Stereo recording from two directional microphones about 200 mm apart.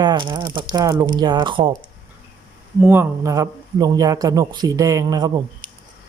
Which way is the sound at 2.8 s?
10° right (ahead or behind).